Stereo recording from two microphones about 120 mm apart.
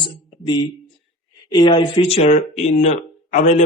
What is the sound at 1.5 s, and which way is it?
Speech, 40° left (ahead or behind).